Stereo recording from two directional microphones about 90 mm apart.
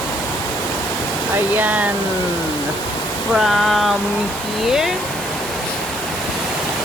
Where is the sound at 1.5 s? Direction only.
20° right (ahead or behind).